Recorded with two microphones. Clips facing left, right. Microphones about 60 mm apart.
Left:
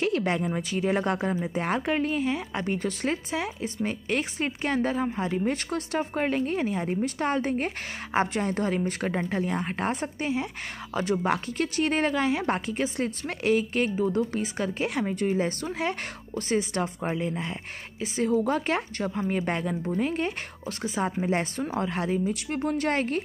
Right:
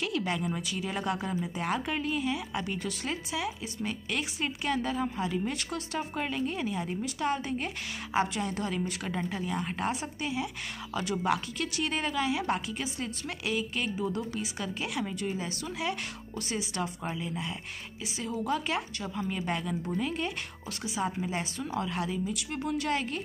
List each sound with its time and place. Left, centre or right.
0.0 s speech: left